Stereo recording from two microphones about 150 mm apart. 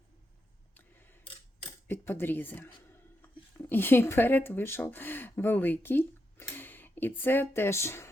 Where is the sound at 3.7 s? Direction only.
15° left (ahead or behind).